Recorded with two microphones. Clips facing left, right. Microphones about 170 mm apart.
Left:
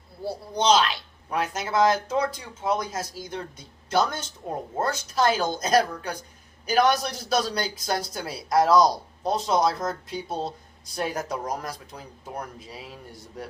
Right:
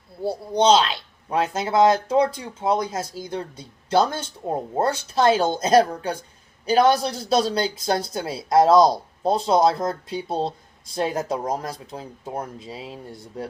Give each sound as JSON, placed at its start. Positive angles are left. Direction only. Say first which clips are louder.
{"t": 0.3, "sound": "speech", "louder": "right 4 dB", "side_deg": -25}